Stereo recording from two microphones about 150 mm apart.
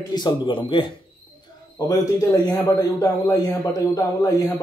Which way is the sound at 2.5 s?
25° left (ahead or behind).